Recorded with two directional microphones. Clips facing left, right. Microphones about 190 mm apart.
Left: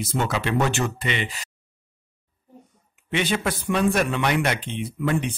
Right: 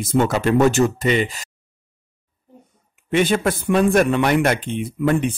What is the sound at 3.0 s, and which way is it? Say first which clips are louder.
Speech: right 6 dB; 50° right (ahead or behind).